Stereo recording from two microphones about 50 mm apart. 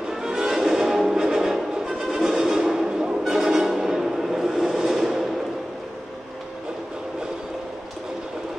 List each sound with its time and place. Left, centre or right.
0.1 s music: centre